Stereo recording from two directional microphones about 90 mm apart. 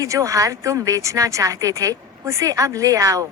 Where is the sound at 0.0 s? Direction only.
40° right (ahead or behind).